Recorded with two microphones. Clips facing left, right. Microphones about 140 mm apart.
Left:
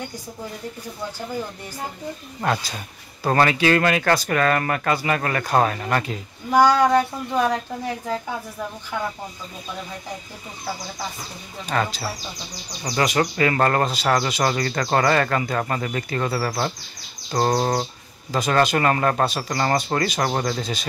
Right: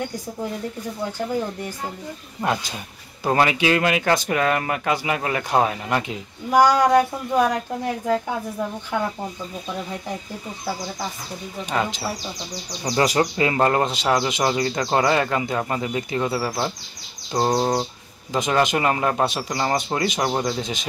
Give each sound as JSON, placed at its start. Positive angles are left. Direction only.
{"t": 2.4, "sound": "speech", "side_deg": -15}
{"t": 11.7, "sound": "speech", "side_deg": -15}
{"t": 12.8, "sound": "speech", "side_deg": -30}